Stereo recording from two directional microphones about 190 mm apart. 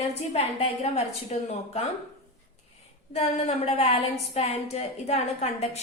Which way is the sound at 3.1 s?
35° left (ahead or behind).